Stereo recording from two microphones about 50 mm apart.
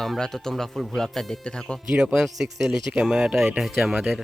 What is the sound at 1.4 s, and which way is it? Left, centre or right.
Speech, left.